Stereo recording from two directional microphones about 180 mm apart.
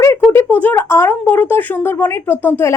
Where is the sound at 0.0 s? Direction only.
15° left (ahead or behind).